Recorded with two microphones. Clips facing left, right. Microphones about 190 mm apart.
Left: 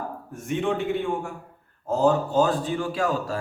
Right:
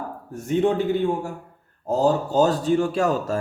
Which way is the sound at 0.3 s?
40° right (ahead or behind).